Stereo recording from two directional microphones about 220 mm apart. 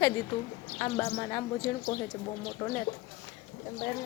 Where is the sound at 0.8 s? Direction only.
15° left (ahead or behind).